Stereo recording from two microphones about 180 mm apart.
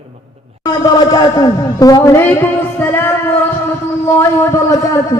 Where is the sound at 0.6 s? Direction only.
20° left (ahead or behind).